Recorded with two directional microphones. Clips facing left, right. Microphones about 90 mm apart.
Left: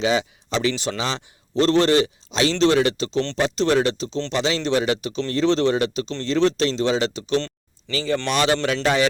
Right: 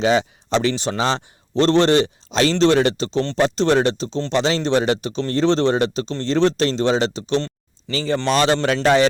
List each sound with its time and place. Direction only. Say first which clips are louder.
0.0 s speech: right 3 dB; 35° right (ahead or behind)